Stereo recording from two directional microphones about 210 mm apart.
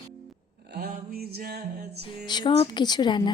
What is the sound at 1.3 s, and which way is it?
Music, 50° right (ahead or behind).